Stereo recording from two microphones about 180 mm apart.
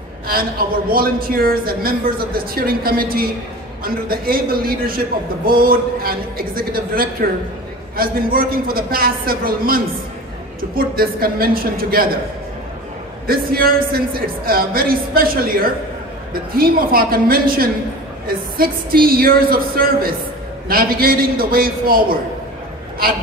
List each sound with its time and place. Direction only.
0.9 s a man's voice: 55° right (ahead or behind)
13.3 s a man's voice: 55° right (ahead or behind)